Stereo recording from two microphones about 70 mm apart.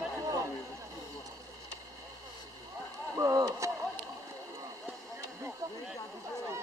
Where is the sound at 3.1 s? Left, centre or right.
Right.